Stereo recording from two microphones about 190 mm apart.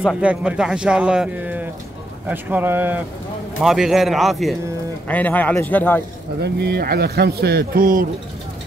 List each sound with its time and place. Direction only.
0.0 s a man's voice: 5° right (ahead or behind)
6.4 s a man's voice: 60° right (ahead or behind)